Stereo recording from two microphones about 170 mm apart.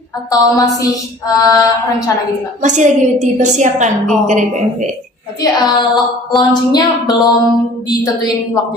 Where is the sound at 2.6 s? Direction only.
45° right (ahead or behind).